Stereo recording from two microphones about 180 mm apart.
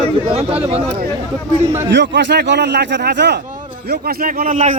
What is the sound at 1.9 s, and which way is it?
A man's voice, 75° right (ahead or behind).